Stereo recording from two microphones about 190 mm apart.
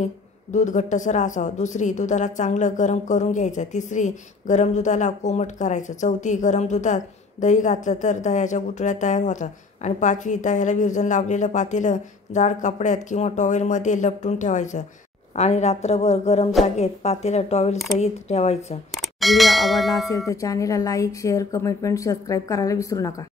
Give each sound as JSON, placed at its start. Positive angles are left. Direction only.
{"t": 0.0, "sound": "a woman's voice", "side_deg": 40}
{"t": 18.9, "sound": "speech", "side_deg": 0}
{"t": 20.1, "sound": "speech", "side_deg": 15}